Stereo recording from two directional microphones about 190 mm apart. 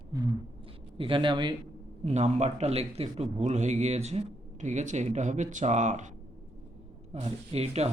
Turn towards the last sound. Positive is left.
turn(degrees=-35)  # may be behind; listen again after turning